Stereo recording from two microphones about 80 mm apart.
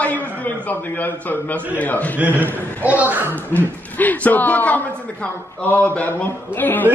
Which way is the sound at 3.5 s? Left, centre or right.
Left.